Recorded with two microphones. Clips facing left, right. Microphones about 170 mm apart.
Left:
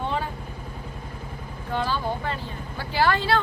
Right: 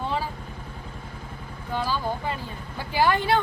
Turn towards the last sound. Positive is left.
turn(degrees=-15)  # may be behind; listen again after turning